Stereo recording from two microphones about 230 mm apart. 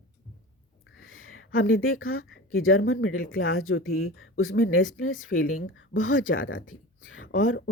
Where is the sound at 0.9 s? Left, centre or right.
Left.